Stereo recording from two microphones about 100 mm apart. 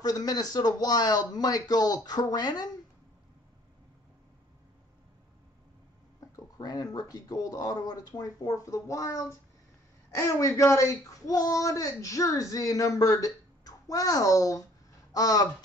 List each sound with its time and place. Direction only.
0.0 s speech: 40° left (ahead or behind)
6.3 s speech: 35° left (ahead or behind)